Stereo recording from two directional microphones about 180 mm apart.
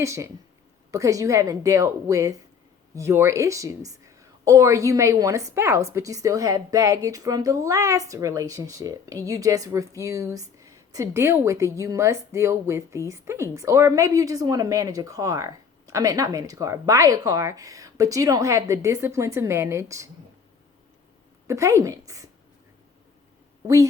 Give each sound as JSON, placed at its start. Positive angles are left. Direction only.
{"t": 0.0, "sound": "a woman's voice", "side_deg": -15}
{"t": 21.4, "sound": "a woman's voice", "side_deg": -15}